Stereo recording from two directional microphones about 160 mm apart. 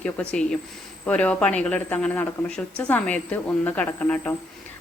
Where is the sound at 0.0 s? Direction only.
5° left (ahead or behind).